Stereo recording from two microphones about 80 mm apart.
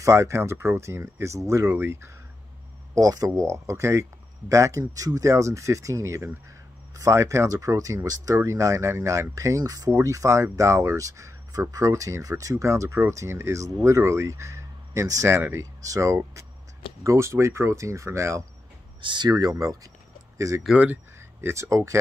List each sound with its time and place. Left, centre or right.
0.0 s speech: right
2.9 s speech: right
15.3 s speech: right
15.6 s speech: right
18.9 s speech: right
20.7 s speech: right